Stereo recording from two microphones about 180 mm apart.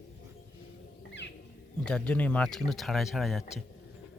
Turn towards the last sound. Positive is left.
turn(degrees=0)  # may be behind; listen again after turning